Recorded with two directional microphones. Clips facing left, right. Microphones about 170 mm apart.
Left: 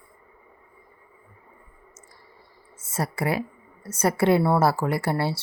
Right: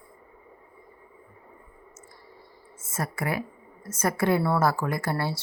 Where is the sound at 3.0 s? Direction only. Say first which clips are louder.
Left 4 dB; 30° left (ahead or behind).